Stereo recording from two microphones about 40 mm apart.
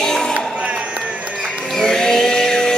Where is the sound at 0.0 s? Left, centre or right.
Centre.